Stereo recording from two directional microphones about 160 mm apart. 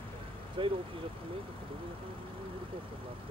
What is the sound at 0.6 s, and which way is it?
Vehicle, 30° right (ahead or behind).